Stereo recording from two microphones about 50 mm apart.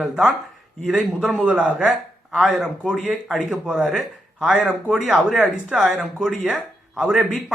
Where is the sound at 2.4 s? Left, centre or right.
Centre.